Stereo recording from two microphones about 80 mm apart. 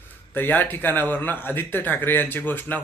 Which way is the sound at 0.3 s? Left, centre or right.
Left.